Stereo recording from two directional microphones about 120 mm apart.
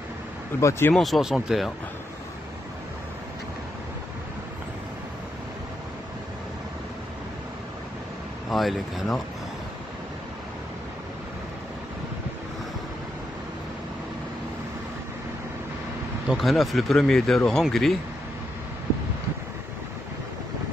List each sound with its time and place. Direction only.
0.6 s speech: 25° left (ahead or behind)
0.9 s speech: centre (ahead or behind)
8.5 s speech: centre (ahead or behind)
16.3 s speech: centre (ahead or behind)